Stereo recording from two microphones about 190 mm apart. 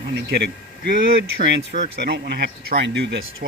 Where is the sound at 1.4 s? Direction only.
65° right (ahead or behind).